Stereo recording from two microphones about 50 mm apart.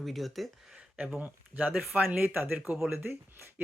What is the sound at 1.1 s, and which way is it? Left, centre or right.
Speech, right.